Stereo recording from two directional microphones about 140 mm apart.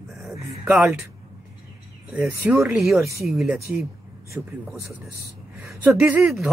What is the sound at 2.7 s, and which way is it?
Speech, centre (ahead or behind).